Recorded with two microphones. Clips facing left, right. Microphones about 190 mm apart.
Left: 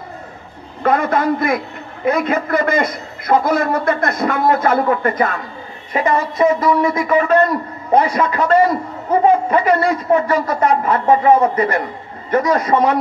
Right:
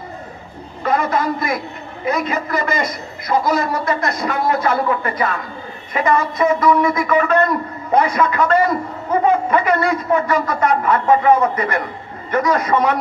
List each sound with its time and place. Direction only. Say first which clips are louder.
0.8 s a man's voice: left 3 dB; 55° left (ahead or behind)
5.9 s a man's voice: left 1 dB; 30° left (ahead or behind)
9.1 s a sound: left 3 dB; 30° left (ahead or behind)
9.5 s a man's voice: left 2 dB; 30° left (ahead or behind)